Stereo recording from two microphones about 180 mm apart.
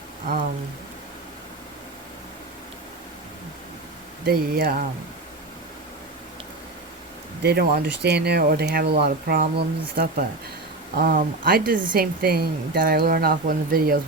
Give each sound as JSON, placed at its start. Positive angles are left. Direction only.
{"t": 4.3, "sound": "a woman's voice", "side_deg": -55}
{"t": 7.4, "sound": "a woman's voice", "side_deg": -60}